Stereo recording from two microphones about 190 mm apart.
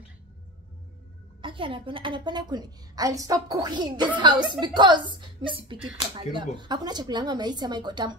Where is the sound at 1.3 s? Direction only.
25° right (ahead or behind).